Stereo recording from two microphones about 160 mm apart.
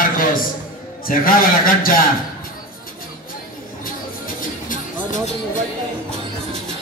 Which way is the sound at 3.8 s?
60° left (ahead or behind).